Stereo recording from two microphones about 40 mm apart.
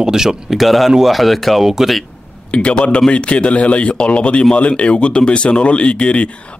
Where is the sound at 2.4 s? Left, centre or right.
Left.